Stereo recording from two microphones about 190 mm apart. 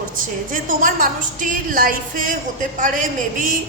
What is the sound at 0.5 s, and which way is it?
A woman's voice, 45° right (ahead or behind).